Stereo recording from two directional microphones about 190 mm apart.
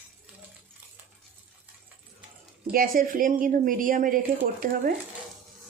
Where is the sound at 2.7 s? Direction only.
50° right (ahead or behind).